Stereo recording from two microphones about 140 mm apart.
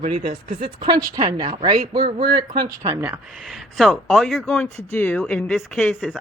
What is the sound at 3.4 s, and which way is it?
Speech, centre (ahead or behind).